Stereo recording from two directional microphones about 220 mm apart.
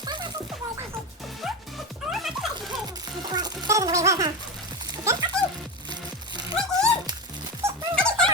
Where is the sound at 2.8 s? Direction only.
20° right (ahead or behind).